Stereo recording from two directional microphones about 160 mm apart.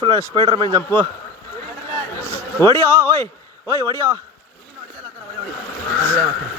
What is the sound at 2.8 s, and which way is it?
Speech, 15° left (ahead or behind).